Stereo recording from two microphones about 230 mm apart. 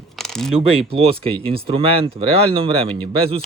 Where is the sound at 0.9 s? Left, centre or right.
Right.